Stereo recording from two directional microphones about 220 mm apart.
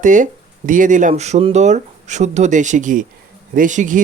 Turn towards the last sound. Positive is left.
turn(degrees=-35)  # may be behind; listen again after turning